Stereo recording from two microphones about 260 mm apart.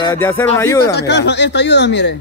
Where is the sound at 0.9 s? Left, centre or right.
Left.